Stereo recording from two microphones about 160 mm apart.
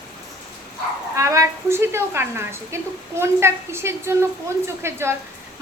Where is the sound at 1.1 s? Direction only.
20° right (ahead or behind).